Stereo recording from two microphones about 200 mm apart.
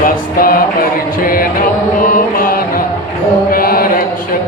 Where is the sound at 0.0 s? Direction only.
45° left (ahead or behind).